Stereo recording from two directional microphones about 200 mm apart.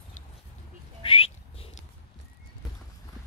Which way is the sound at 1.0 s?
25° left (ahead or behind).